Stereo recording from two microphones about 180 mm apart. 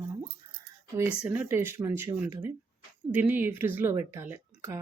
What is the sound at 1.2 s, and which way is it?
Speech, 10° right (ahead or behind).